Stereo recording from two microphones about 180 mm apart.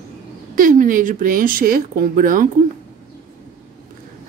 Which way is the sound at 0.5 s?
50° right (ahead or behind).